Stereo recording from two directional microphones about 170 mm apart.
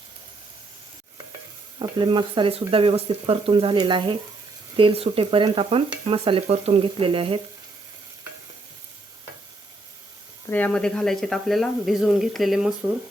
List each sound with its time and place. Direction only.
1.8 s stir: 25° right (ahead or behind)
10.5 s speech: 10° left (ahead or behind)